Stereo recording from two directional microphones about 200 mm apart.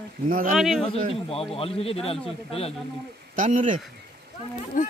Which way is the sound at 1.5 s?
30° left (ahead or behind).